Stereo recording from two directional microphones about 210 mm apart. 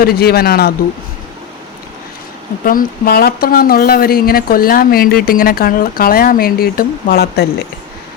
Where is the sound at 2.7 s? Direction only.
45° left (ahead or behind).